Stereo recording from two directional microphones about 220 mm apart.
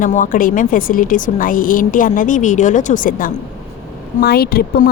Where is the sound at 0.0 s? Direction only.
35° left (ahead or behind).